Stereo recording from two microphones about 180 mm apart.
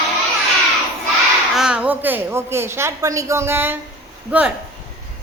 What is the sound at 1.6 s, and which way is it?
Speech, 5° right (ahead or behind).